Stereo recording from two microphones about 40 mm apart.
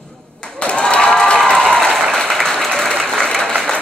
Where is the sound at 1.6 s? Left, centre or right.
Centre.